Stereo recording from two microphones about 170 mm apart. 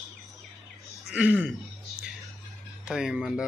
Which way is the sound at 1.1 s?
10° right (ahead or behind).